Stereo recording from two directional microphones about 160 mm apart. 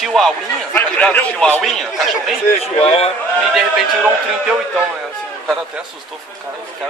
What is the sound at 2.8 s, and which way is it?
Speech, 40° left (ahead or behind).